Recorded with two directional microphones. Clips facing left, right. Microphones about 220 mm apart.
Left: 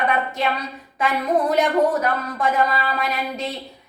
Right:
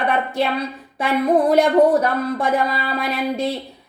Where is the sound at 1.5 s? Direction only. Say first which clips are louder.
Right 5 dB; 30° right (ahead or behind).